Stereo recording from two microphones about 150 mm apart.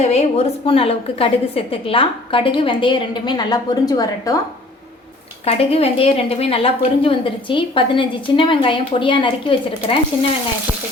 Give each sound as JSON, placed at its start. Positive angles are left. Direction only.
{"t": 0.0, "sound": "a woman's voice", "side_deg": 45}
{"t": 5.5, "sound": "a woman's voice", "side_deg": 40}